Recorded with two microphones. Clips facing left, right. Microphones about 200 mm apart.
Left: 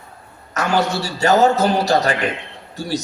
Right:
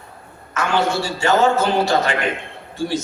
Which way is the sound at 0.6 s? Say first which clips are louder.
Even; 40° left (ahead or behind).